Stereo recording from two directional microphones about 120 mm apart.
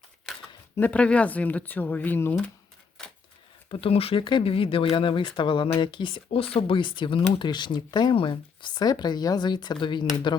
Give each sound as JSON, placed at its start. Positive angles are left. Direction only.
{"t": 0.8, "sound": "speech", "side_deg": 10}
{"t": 3.0, "sound": "a sound", "side_deg": 0}
{"t": 3.7, "sound": "speech", "side_deg": 50}